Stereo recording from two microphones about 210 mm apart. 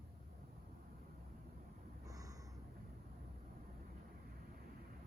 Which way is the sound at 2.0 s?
15° right (ahead or behind).